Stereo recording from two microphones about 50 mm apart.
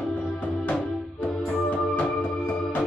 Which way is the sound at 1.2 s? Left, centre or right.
Left.